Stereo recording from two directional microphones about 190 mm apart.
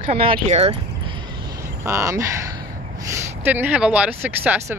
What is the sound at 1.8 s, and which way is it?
Speech, 15° right (ahead or behind).